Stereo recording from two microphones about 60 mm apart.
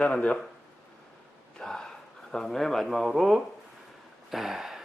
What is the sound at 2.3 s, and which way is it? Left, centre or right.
Speech, centre.